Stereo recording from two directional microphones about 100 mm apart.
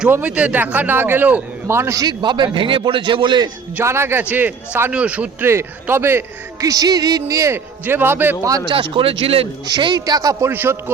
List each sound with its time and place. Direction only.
0.1 s a man's voice: 15° right (ahead or behind)
2.0 s a man's voice: 50° right (ahead or behind)
3.8 s speech: 25° right (ahead or behind)
5.5 s a man's voice: 25° right (ahead or behind)
8.4 s speech: 35° right (ahead or behind)
8.7 s speech: 60° right (ahead or behind)
9.6 s speech: 45° right (ahead or behind)
10.5 s a man's voice: 25° right (ahead or behind)